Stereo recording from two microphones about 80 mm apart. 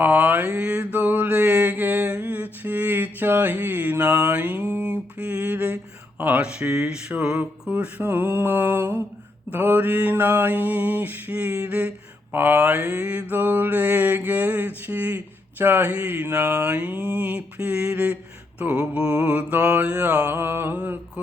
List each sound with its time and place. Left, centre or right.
0.0 s mantra: centre
8.0 s mantra: right